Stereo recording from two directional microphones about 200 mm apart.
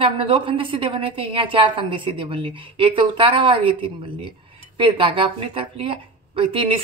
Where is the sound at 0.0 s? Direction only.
25° right (ahead or behind).